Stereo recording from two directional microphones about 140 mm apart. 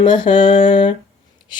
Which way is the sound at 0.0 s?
35° left (ahead or behind).